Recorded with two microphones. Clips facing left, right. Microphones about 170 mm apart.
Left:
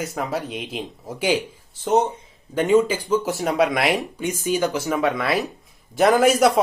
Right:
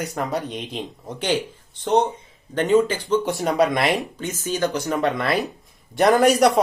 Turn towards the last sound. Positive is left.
turn(degrees=0)  # may be behind; listen again after turning